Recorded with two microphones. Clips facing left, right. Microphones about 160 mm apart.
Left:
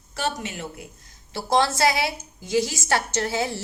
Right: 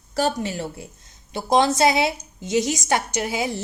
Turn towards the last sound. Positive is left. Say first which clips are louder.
# even
turn(degrees=-15)  # may be behind; listen again after turning